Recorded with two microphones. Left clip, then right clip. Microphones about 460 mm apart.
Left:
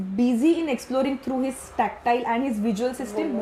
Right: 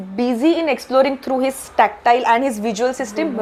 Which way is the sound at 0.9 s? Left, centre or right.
Right.